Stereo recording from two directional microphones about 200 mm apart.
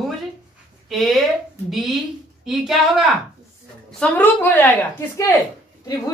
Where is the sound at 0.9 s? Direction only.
Centre (ahead or behind).